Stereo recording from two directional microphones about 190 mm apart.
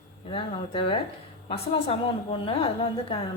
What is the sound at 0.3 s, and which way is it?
A woman's voice, 30° left (ahead or behind).